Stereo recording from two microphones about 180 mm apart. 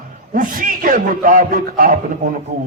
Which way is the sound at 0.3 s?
50° right (ahead or behind).